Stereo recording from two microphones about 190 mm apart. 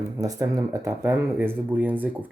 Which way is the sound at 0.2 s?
20° right (ahead or behind).